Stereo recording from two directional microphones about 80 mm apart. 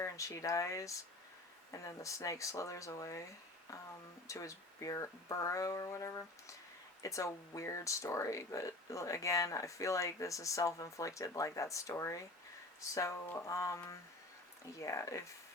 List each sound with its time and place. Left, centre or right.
0.0 s speech: left
4.3 s speech: left